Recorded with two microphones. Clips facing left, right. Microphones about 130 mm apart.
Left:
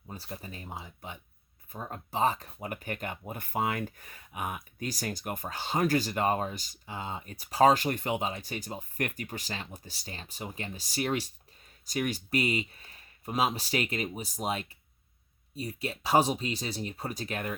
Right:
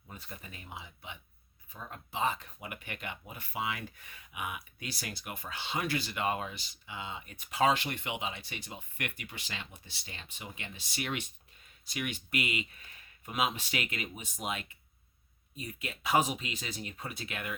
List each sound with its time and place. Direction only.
0.1 s speech: 30° left (ahead or behind)